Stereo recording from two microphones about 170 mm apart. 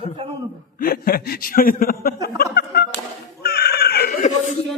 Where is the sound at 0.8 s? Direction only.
60° left (ahead or behind).